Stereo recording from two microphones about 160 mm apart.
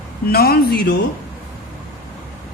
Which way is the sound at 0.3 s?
75° left (ahead or behind).